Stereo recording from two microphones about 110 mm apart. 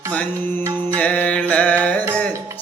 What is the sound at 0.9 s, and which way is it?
Music, 15° left (ahead or behind).